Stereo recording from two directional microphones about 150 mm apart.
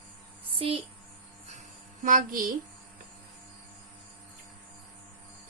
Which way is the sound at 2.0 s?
65° right (ahead or behind).